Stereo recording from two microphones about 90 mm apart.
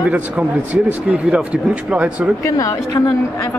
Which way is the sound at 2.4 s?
40° left (ahead or behind).